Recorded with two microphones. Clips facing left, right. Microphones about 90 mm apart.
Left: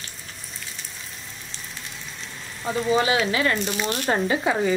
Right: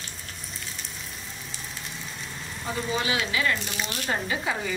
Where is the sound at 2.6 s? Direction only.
30° left (ahead or behind).